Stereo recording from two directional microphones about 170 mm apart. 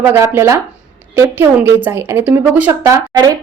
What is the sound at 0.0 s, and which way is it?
A woman's voice, 15° right (ahead or behind).